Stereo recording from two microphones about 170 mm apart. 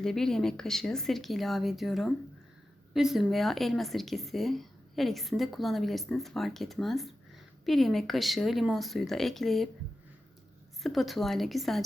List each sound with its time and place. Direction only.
0.0 s speech: centre (ahead or behind)
10.8 s speech: centre (ahead or behind)